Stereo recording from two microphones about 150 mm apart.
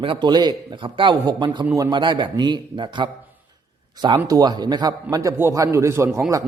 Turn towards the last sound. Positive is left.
turn(degrees=-15)  # may be behind; listen again after turning